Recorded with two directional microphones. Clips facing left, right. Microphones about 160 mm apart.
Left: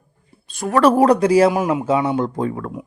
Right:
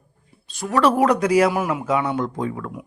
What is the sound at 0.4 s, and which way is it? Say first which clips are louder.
Speech: left 4 dB; 55° left (ahead or behind).